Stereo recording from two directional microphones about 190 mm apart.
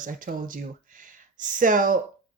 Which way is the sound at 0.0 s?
45° right (ahead or behind).